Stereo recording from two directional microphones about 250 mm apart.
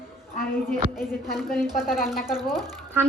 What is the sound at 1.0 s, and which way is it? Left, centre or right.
A woman's voice, centre.